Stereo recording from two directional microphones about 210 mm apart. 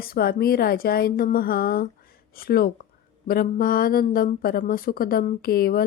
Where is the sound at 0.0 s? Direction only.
45° left (ahead or behind).